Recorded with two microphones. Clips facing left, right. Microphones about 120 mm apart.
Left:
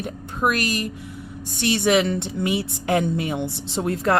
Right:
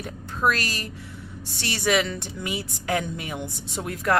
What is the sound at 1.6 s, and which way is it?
A woman's voice, 20° left (ahead or behind).